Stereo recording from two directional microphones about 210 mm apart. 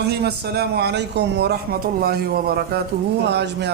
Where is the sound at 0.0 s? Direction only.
50° right (ahead or behind).